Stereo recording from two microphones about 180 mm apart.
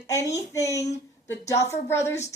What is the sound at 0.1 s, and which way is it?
Speech, 15° left (ahead or behind).